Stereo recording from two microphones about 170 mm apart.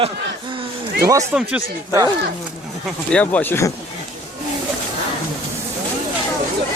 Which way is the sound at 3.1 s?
10° left (ahead or behind).